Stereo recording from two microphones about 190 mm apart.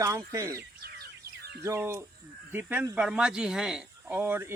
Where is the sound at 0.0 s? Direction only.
15° right (ahead or behind).